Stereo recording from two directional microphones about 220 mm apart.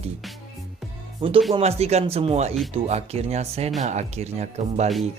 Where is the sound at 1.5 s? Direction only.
30° right (ahead or behind).